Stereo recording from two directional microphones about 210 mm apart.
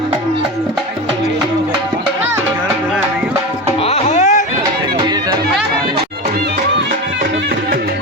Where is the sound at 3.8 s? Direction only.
30° left (ahead or behind).